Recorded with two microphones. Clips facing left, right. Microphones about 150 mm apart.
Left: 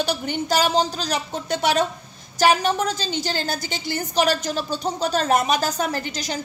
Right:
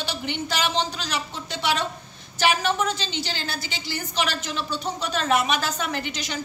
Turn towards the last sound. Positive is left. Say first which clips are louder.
# left 3 dB
turn(degrees=40)  # may be behind; listen again after turning